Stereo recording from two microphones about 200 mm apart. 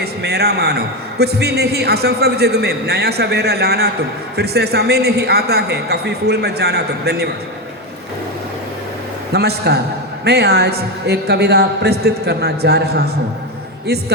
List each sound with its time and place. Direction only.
0.0 s a man's voice: 55° right (ahead or behind)
9.3 s a man's voice: 55° right (ahead or behind)